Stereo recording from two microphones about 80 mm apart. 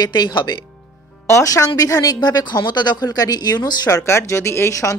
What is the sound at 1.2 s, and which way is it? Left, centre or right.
A woman's voice, left.